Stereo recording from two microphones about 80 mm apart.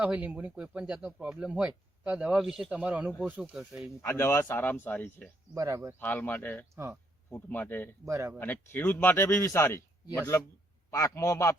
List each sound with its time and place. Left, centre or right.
0.0 s speech: centre
3.5 s speech: centre
4.0 s speech: left
5.5 s speech: right
6.0 s speech: left
8.0 s speech: right
8.4 s a man's voice: left